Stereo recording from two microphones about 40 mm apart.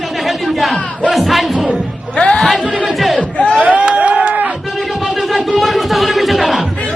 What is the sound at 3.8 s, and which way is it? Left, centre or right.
Run, right.